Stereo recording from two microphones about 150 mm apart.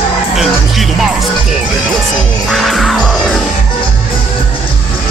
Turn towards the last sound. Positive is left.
turn(degrees=0)  # may be behind; listen again after turning